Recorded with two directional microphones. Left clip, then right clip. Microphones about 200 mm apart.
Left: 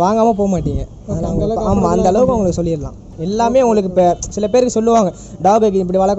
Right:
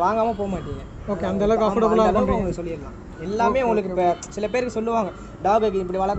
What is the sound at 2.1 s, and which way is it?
Speech, 60° left (ahead or behind).